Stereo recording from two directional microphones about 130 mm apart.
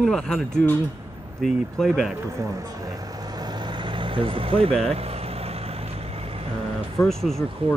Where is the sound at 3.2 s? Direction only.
30° right (ahead or behind); by 6.5 s 50° right (ahead or behind).